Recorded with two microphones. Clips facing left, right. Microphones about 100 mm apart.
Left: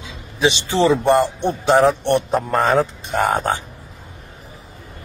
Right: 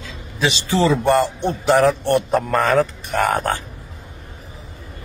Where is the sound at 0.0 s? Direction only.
20° left (ahead or behind).